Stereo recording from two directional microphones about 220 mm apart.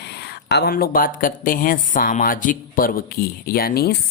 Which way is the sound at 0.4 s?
50° left (ahead or behind).